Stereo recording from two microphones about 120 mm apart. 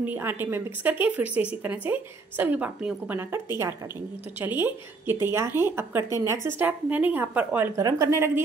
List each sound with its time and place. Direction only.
0.0 s a woman's voice: 15° right (ahead or behind)